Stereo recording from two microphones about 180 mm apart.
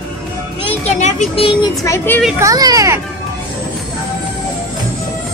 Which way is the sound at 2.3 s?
20° right (ahead or behind).